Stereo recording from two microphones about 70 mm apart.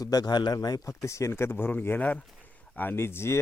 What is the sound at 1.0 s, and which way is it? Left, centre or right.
Speech, left.